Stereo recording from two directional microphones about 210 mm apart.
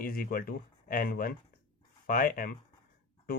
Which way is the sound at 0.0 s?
45° left (ahead or behind).